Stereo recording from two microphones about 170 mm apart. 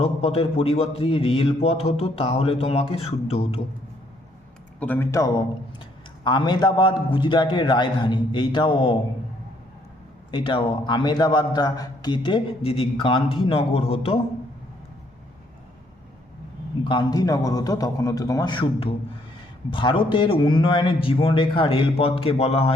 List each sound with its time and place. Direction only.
0.0 s a man's voice: 35° left (ahead or behind)
4.8 s a man's voice: 10° left (ahead or behind)
6.2 s a man's voice: 25° left (ahead or behind)
10.3 s a man's voice: 30° left (ahead or behind)
16.9 s a man's voice: 25° left (ahead or behind)